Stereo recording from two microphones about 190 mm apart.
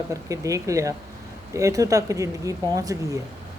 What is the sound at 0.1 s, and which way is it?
Speech, 15° right (ahead or behind).